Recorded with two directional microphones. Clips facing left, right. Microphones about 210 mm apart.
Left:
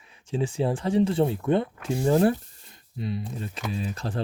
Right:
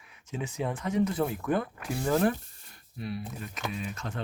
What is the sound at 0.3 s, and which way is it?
Speech, 30° left (ahead or behind).